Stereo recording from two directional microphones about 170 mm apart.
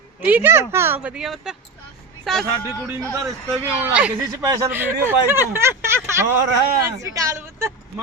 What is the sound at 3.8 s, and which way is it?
A woman's voice, 10° right (ahead or behind).